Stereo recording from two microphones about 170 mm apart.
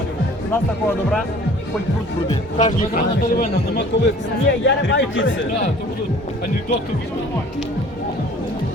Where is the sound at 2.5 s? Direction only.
50° left (ahead or behind).